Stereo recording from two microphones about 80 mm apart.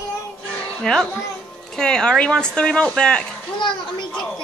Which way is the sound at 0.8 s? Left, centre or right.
Centre.